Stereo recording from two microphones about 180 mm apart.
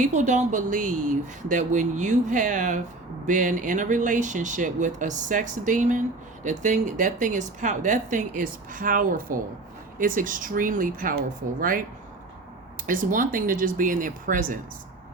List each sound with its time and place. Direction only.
0.0 s speech: 40° right (ahead or behind)
12.8 s speech: 50° right (ahead or behind)